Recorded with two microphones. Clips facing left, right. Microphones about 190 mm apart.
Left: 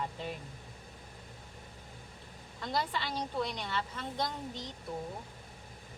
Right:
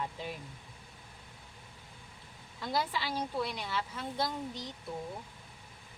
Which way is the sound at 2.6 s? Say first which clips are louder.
Right 1 dB; 5° right (ahead or behind).